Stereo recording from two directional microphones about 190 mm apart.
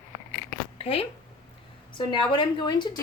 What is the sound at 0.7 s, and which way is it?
Speech, 30° left (ahead or behind).